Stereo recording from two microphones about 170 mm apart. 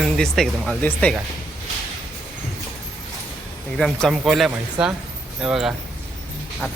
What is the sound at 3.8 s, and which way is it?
Speech, centre (ahead or behind).